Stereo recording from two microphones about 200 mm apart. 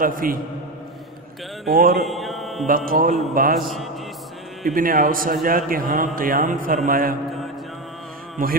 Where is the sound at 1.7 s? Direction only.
50° right (ahead or behind).